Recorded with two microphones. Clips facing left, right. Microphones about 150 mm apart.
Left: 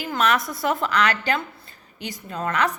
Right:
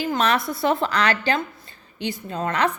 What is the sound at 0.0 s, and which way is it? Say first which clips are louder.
A woman's voice: right 1 dB; 30° right (ahead or behind).